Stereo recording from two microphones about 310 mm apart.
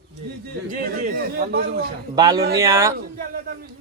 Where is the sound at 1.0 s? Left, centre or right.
Right.